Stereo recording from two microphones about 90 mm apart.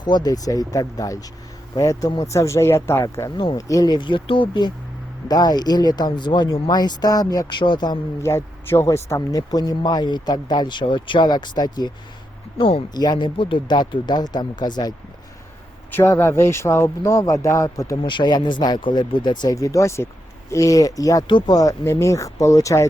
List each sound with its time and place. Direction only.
0.0 s speech: 50° left (ahead or behind)
5.3 s speech: 45° left (ahead or behind)
7.6 s speech: 60° left (ahead or behind)
8.2 s speech: 30° left (ahead or behind); by 11.9 s 50° left (ahead or behind)
12.5 s speech: 90° left
12.9 s speech: 50° left (ahead or behind)
16.0 s speech: 30° left (ahead or behind)
18.0 s speech: 60° left (ahead or behind)
19.5 s speech: 40° left (ahead or behind)
21.2 s speech: 55° left (ahead or behind); by 22.9 s 35° left (ahead or behind)